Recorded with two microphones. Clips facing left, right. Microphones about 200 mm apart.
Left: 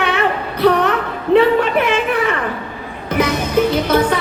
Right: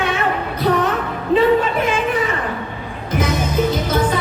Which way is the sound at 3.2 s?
65° left (ahead or behind).